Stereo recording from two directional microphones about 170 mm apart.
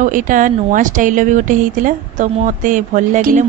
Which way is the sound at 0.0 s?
50° right (ahead or behind).